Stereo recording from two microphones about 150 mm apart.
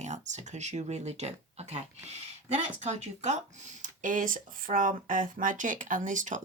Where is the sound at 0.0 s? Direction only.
50° right (ahead or behind).